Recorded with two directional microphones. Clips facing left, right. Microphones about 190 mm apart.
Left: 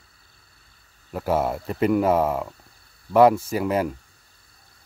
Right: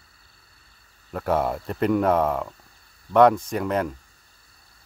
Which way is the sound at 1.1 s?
5° left (ahead or behind).